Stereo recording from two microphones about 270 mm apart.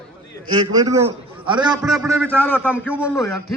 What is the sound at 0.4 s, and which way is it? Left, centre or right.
A man's voice, centre.